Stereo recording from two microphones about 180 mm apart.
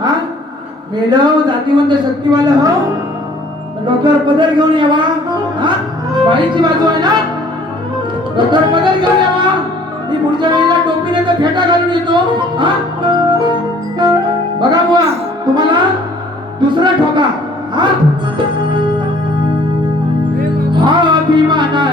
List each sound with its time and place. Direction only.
0.9 s speech: 25° right (ahead or behind)
3.8 s speech: 25° right (ahead or behind)
8.5 s speech: 25° right (ahead or behind)
10.1 s music: 25° right (ahead or behind)
14.6 s speech: 20° right (ahead or behind)
20.7 s music: 25° right (ahead or behind)